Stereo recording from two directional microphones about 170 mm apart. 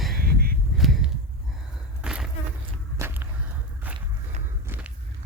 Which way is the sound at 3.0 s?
15° right (ahead or behind).